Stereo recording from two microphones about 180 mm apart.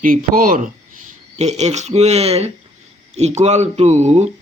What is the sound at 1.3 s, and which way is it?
Speech, 40° right (ahead or behind).